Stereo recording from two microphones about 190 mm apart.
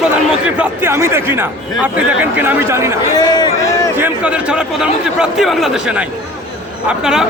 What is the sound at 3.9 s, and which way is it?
A man's voice, 10° right (ahead or behind).